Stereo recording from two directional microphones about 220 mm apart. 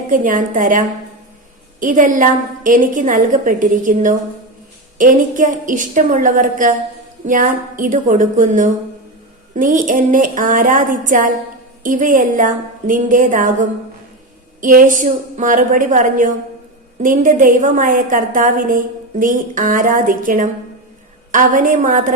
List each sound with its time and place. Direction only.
0.1 s a woman's voice: 35° right (ahead or behind)